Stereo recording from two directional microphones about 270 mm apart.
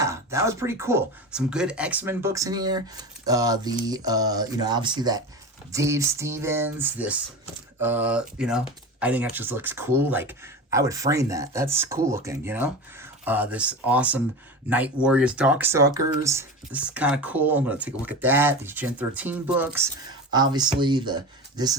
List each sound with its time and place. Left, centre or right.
0.0 s speech: centre